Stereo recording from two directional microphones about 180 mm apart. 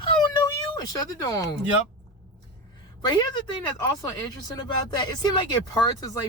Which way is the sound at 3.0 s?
25° left (ahead or behind).